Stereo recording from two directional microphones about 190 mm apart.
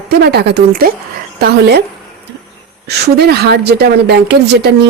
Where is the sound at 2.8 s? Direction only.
60° right (ahead or behind).